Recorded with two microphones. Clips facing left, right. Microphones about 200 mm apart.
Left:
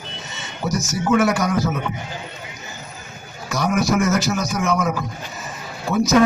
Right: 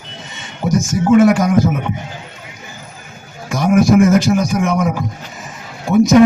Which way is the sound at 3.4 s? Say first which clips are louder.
Right 7 dB; 20° right (ahead or behind).